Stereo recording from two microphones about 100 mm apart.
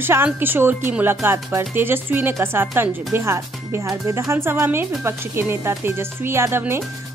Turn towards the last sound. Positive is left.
turn(degrees=-25)  # may be behind; listen again after turning